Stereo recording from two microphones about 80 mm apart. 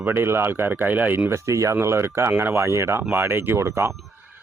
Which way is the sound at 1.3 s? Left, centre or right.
Right.